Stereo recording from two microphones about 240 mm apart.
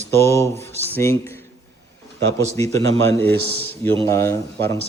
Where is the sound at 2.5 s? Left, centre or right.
Centre.